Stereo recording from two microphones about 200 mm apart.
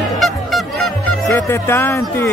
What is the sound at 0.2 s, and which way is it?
Honk, centre (ahead or behind).